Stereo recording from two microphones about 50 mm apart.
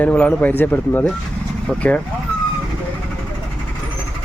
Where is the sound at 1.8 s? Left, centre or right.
Left.